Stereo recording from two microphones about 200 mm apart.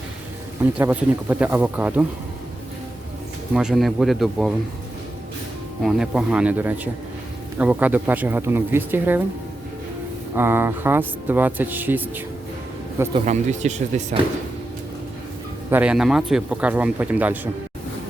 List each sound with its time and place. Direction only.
0.6 s speech: 10° right (ahead or behind)
3.5 s speech: 5° right (ahead or behind)
5.8 s speech: 5° right (ahead or behind)
10.3 s speech: 10° right (ahead or behind)
13.1 s speech: 35° right (ahead or behind)
15.7 s speech: 5° right (ahead or behind)